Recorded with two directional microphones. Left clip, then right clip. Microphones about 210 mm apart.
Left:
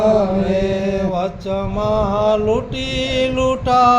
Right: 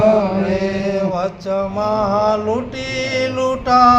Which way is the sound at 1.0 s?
50° left (ahead or behind).